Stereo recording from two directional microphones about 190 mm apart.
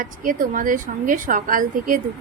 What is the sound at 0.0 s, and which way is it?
A woman's voice, 45° right (ahead or behind).